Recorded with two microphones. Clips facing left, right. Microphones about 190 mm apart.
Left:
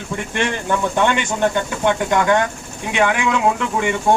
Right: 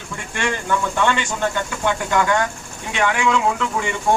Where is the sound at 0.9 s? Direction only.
20° left (ahead or behind).